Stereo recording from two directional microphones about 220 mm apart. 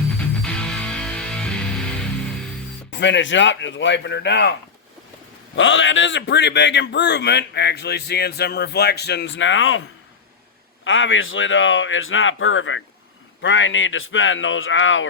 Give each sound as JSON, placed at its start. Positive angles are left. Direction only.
{"t": 0.2, "sound": "music", "side_deg": 5}
{"t": 2.9, "sound": "a man's voice", "side_deg": 55}
{"t": 5.5, "sound": "a man's voice", "side_deg": 60}
{"t": 10.8, "sound": "speech", "side_deg": 60}